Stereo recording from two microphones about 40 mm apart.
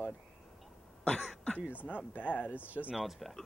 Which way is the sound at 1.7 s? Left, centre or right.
Left.